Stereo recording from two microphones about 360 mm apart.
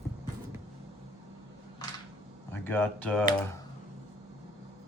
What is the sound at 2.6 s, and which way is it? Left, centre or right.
Speech, centre.